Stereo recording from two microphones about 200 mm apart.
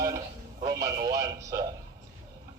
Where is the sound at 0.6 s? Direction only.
15° right (ahead or behind).